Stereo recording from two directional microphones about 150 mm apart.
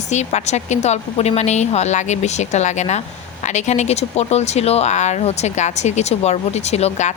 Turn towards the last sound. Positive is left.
turn(degrees=50)  # may be behind; listen again after turning